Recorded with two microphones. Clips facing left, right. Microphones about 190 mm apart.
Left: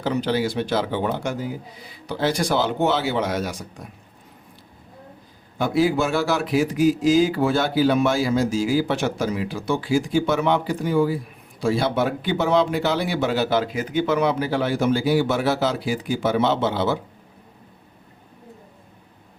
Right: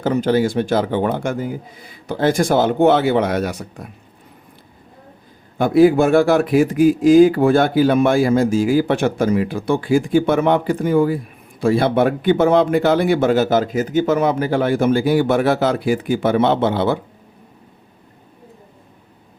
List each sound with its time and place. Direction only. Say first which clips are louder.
0.0 s speech: right 6 dB; 50° right (ahead or behind)
5.5 s speech: right 8 dB; 55° right (ahead or behind)